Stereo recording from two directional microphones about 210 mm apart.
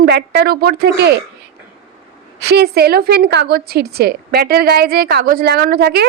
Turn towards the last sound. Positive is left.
turn(degrees=-50)  # may be behind; listen again after turning